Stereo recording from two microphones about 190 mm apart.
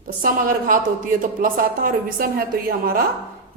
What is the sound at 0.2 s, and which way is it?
A woman's voice, 45° right (ahead or behind).